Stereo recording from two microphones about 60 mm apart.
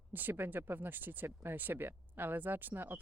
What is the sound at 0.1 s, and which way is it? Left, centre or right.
Speech, right.